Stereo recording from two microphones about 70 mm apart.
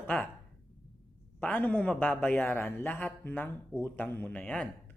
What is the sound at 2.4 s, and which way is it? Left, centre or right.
Speech, left.